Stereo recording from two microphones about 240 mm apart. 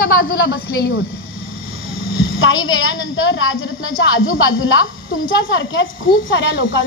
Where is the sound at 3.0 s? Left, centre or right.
Left.